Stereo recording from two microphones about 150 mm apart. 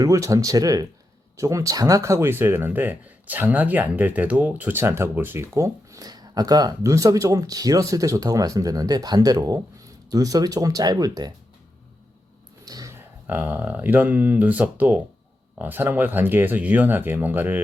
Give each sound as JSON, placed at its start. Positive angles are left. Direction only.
{"t": 0.0, "sound": "speech", "side_deg": -20}
{"t": 12.6, "sound": "a sound", "side_deg": -25}
{"t": 13.2, "sound": "speech", "side_deg": -10}